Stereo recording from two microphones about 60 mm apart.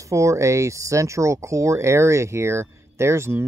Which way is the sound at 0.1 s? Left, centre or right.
Right.